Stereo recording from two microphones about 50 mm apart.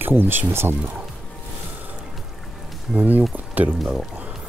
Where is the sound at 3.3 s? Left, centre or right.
Right.